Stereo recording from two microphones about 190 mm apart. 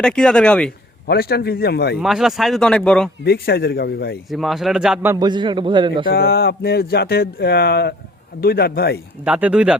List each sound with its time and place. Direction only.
0.0 s speech: 5° left (ahead or behind)
1.0 s speech: 55° left (ahead or behind)
2.0 s speech: centre (ahead or behind)
3.2 s speech: 55° left (ahead or behind)
4.3 s speech: centre (ahead or behind)
5.1 s a man's voice: 20° right (ahead or behind)
6.1 s a man's voice: 55° left (ahead or behind)
9.2 s speech: 5° right (ahead or behind)